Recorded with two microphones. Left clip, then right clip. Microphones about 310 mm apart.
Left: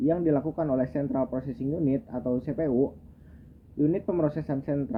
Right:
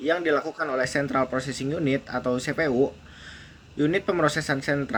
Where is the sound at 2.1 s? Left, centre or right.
Right.